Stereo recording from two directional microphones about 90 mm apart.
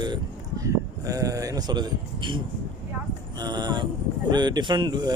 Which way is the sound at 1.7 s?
60° right (ahead or behind).